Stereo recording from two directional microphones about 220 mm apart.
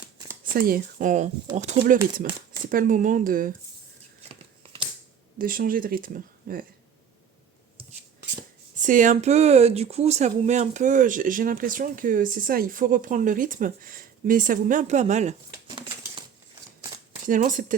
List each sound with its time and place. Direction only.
0.5 s speech: 40° right (ahead or behind)
5.4 s speech: 40° right (ahead or behind)
8.7 s speech: 35° right (ahead or behind)
17.2 s speech: 40° right (ahead or behind)